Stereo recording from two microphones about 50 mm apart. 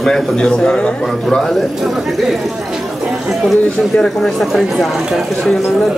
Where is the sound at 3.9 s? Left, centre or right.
Centre.